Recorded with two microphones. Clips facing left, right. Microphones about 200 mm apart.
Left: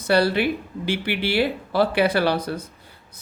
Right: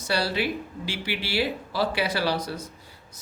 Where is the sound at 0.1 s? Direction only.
55° left (ahead or behind).